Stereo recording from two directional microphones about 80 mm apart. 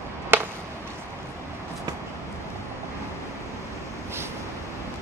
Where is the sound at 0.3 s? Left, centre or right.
Right.